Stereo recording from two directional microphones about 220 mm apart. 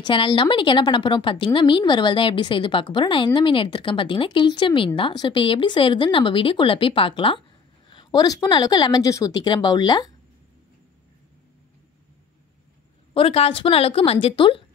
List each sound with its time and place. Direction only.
0.0 s speech: 20° left (ahead or behind)
13.1 s speech: 25° left (ahead or behind)